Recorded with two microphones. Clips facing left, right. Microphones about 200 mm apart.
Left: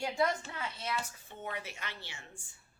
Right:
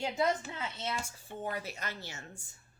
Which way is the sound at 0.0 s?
20° right (ahead or behind).